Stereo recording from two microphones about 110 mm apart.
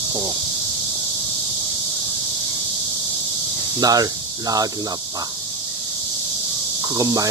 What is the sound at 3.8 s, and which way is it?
Speech, 35° right (ahead or behind).